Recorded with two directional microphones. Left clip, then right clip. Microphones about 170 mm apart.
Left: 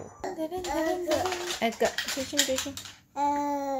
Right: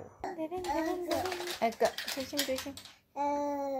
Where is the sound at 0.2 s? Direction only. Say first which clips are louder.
Left 4 dB; 5° left (ahead or behind).